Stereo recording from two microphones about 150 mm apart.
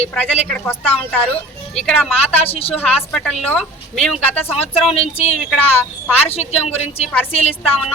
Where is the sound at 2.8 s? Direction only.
10° left (ahead or behind).